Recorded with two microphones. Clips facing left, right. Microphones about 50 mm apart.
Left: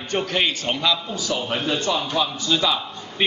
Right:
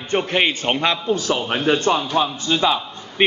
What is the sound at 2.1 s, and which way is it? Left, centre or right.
A man's voice, right.